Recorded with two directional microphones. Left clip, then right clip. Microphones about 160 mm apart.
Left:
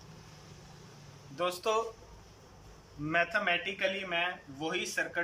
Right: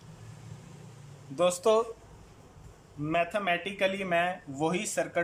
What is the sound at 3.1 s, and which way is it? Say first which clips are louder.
Speech: right 1 dB; 25° right (ahead or behind).